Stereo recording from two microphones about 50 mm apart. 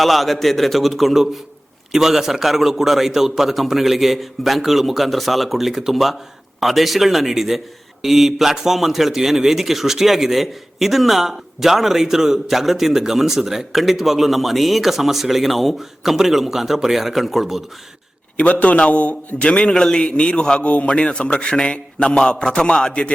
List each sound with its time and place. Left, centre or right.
0.0 s a man's voice: centre
18.6 s a man's voice: left